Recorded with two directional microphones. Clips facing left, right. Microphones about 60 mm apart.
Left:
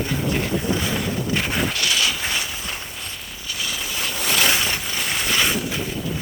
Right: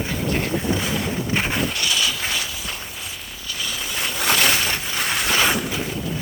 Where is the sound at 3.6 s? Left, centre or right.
Centre.